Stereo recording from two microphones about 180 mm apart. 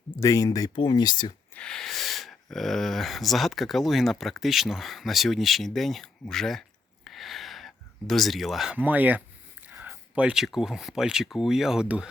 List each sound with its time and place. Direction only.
0.2 s speech: 15° left (ahead or behind)
1.5 s speech: 5° left (ahead or behind)